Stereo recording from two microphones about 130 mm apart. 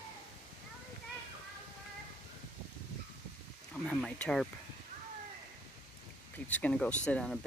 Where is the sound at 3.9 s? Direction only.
5° left (ahead or behind).